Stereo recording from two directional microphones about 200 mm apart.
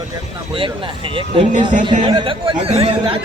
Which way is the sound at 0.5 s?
25° right (ahead or behind).